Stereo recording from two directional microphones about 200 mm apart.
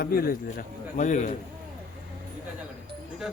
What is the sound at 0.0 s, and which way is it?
Speech, 45° left (ahead or behind).